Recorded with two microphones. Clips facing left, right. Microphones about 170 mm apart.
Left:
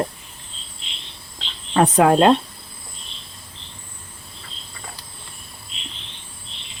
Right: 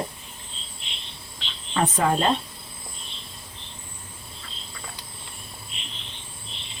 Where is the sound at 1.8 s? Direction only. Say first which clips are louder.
Left 8 dB; 70° left (ahead or behind).